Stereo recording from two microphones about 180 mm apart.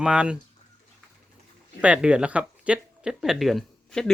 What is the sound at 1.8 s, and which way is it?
Speech, 5° right (ahead or behind).